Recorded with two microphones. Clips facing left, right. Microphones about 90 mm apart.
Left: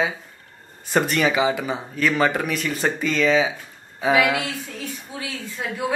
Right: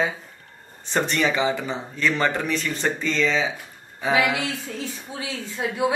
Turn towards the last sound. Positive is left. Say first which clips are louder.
# right 3 dB
turn(degrees=-20)  # may be behind; listen again after turning